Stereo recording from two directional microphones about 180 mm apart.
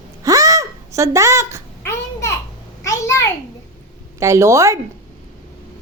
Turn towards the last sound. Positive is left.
turn(degrees=-15)  # may be behind; listen again after turning